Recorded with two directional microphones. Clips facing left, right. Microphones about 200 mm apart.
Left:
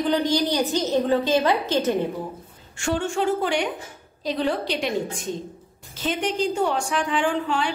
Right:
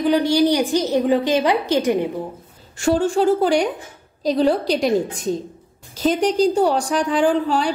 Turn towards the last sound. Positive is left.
turn(degrees=-35)  # may be behind; listen again after turning